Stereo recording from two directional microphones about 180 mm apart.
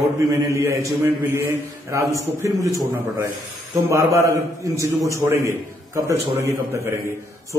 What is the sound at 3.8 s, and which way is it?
A man's voice, 15° right (ahead or behind).